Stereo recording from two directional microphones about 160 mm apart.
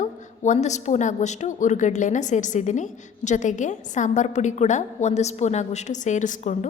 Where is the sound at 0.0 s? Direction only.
50° left (ahead or behind).